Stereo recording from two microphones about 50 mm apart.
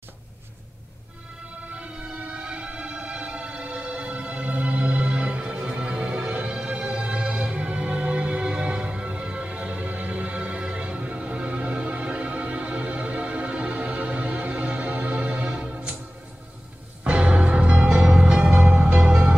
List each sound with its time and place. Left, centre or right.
1.7 s music: right
17.0 s music: right